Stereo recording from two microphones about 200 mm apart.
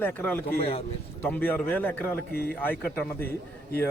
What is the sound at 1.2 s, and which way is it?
A man's voice, 10° left (ahead or behind).